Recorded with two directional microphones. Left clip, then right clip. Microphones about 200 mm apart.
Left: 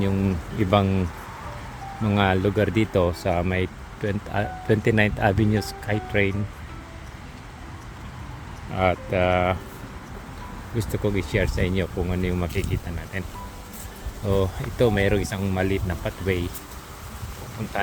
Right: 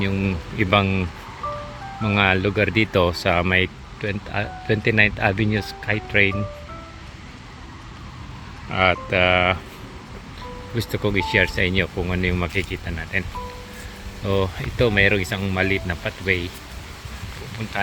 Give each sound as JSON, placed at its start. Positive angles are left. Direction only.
{"t": 0.0, "sound": "speech", "side_deg": 10}
{"t": 2.0, "sound": "speech", "side_deg": 10}
{"t": 4.0, "sound": "speech", "side_deg": 20}
{"t": 8.7, "sound": "speech", "side_deg": 0}
{"t": 10.8, "sound": "speech", "side_deg": 0}
{"t": 14.3, "sound": "speech", "side_deg": 10}